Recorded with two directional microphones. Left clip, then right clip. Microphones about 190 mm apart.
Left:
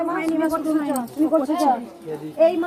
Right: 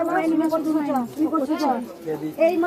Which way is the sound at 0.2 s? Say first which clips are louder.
Right 1 dB; 30° left (ahead or behind).